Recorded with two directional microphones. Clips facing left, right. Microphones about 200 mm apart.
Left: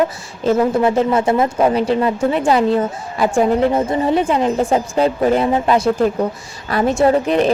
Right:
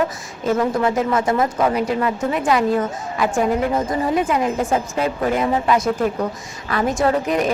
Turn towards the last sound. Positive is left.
turn(degrees=30)  # may be behind; listen again after turning